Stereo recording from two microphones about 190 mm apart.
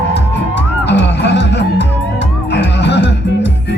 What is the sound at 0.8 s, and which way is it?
Music, 65° left (ahead or behind).